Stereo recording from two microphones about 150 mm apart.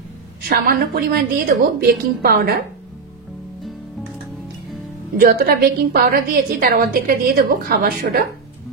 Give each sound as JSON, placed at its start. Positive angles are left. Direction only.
{"t": 0.4, "sound": "a woman's voice", "side_deg": -85}
{"t": 5.1, "sound": "a woman's voice", "side_deg": -80}